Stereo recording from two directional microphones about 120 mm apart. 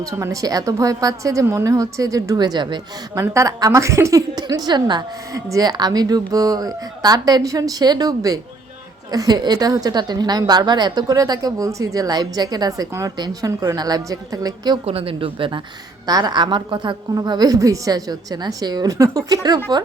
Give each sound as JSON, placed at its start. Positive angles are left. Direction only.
{"t": 0.0, "sound": "a woman's voice", "side_deg": -25}
{"t": 3.3, "sound": "a woman's voice", "side_deg": -25}
{"t": 14.8, "sound": "a woman's voice", "side_deg": -50}
{"t": 16.0, "sound": "a woman's voice", "side_deg": -35}